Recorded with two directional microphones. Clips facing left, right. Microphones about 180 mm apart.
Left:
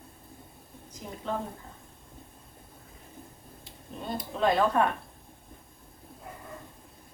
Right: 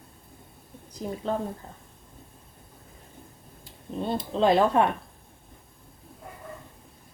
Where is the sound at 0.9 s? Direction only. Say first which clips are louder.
Right 6 dB; 35° right (ahead or behind).